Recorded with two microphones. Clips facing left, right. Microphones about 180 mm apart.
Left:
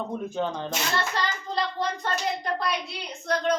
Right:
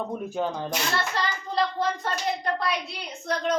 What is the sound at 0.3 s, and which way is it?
Speech, 10° right (ahead or behind).